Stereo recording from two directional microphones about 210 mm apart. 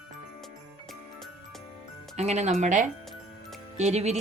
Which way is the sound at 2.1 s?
30° right (ahead or behind).